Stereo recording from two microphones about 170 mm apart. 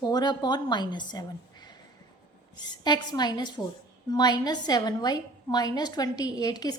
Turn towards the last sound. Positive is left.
turn(degrees=25)  # may be behind; listen again after turning